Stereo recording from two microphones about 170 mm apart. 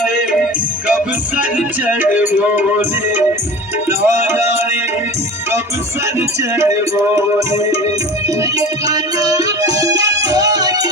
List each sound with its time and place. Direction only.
0.0 s music: 5° right (ahead or behind)
1.4 s music: 10° right (ahead or behind)
6.1 s music: 15° right (ahead or behind)
9.1 s music: 20° right (ahead or behind)